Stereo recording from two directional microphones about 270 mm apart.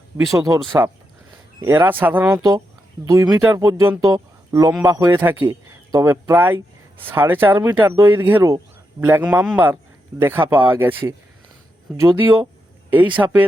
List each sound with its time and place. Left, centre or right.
0.3 s speech: centre
1.6 s speech: centre
11.9 s speech: centre